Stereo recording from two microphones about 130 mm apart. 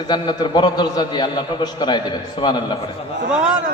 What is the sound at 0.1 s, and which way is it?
A man's voice, 35° left (ahead or behind).